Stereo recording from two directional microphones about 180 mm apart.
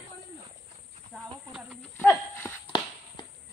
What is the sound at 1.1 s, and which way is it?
Speech, 5° left (ahead or behind).